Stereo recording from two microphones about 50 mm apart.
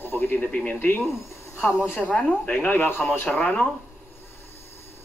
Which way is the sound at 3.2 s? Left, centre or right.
Left.